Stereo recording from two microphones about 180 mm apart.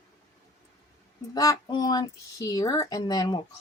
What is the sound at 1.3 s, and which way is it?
Speech, 20° left (ahead or behind).